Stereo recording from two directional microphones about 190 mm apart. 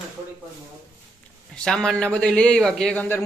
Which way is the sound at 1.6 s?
5° left (ahead or behind).